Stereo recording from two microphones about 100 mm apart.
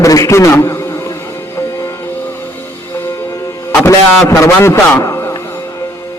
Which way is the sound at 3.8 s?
30° left (ahead or behind).